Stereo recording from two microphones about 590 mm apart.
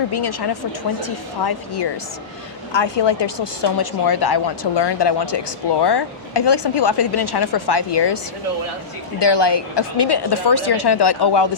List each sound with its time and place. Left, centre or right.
0.1 s a woman's voice: left